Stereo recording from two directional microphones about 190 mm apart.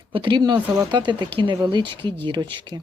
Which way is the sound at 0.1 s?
25° right (ahead or behind).